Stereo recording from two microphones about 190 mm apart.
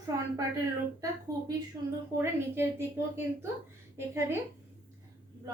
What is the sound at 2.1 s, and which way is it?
A woman's voice, 10° right (ahead or behind).